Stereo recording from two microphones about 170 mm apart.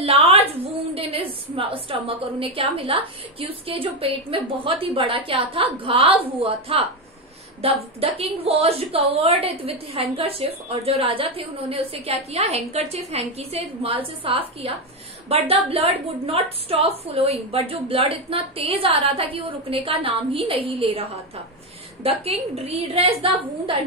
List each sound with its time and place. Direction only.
0.0 s a woman's voice: 35° right (ahead or behind)